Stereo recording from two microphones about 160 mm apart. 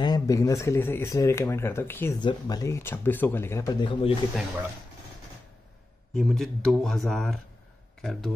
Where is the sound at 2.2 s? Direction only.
25° left (ahead or behind).